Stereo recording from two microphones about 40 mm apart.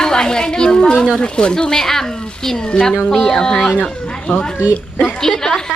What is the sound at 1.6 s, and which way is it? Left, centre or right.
A child's voice, centre.